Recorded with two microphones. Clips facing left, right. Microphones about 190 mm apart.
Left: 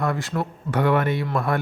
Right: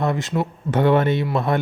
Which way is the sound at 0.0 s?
20° right (ahead or behind).